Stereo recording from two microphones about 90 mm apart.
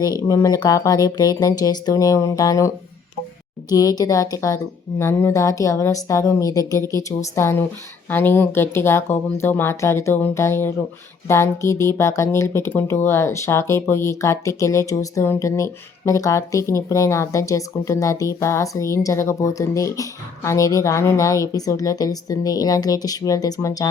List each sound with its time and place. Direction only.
0.3 s speech: 40° left (ahead or behind)